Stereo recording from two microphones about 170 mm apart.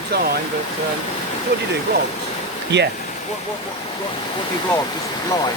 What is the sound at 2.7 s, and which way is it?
Speech, 90° right.